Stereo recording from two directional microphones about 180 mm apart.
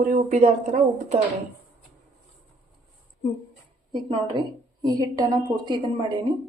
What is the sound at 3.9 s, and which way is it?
A woman's voice, 25° right (ahead or behind).